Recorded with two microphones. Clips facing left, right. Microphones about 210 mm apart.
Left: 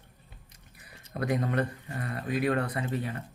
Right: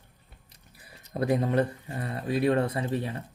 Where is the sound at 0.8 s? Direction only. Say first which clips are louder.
Right 4 dB; 30° right (ahead or behind).